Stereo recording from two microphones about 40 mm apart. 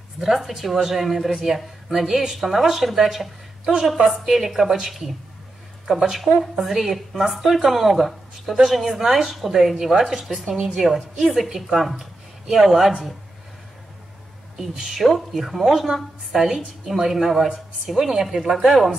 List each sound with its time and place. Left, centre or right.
0.2 s a woman's voice: centre
6.6 s a woman's voice: centre
14.6 s a woman's voice: centre